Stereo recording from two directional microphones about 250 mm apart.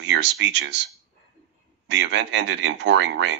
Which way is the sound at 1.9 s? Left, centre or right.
Right.